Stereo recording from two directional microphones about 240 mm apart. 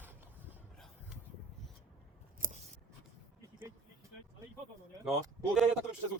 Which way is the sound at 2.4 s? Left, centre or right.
Right.